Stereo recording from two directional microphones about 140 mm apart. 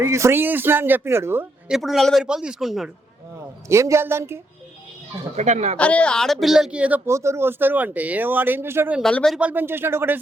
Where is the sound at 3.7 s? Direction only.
20° right (ahead or behind).